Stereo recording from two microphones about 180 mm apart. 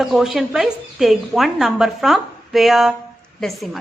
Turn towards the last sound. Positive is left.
turn(degrees=0)  # may be behind; listen again after turning